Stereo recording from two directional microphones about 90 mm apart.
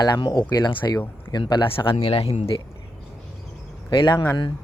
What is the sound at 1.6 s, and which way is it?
Speech, 70° left (ahead or behind).